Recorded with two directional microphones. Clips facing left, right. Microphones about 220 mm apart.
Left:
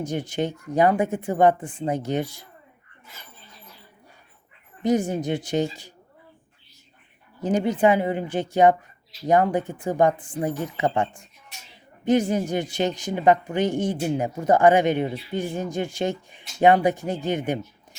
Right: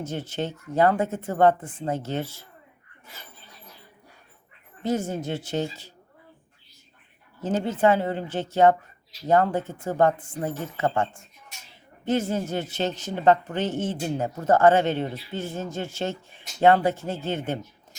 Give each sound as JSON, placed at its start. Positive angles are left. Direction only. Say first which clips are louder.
{"t": 0.0, "sound": "speech", "louder": "left 4 dB", "side_deg": 15}
{"t": 4.8, "sound": "speech", "louder": "left 4 dB", "side_deg": 15}
{"t": 7.4, "sound": "speech", "louder": "left 2 dB", "side_deg": 15}